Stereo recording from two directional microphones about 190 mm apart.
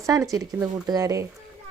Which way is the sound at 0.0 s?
15° right (ahead or behind).